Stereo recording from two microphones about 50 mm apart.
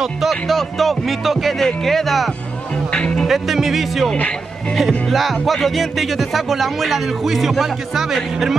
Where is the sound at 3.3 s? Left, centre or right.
Centre.